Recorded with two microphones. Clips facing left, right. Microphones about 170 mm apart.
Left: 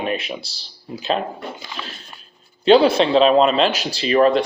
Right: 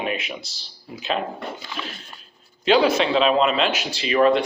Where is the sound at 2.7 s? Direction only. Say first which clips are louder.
Left 5 dB; 30° left (ahead or behind).